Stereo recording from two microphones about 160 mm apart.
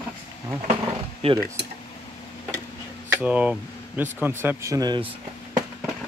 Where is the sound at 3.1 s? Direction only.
10° right (ahead or behind); by 5.0 s 25° right (ahead or behind).